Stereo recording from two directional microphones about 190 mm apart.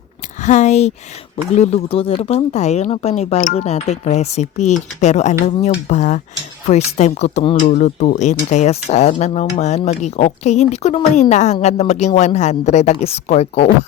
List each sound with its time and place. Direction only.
0.4 s speech: 40° left (ahead or behind)